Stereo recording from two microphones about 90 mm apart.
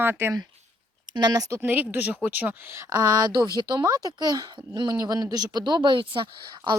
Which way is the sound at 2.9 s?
50° right (ahead or behind).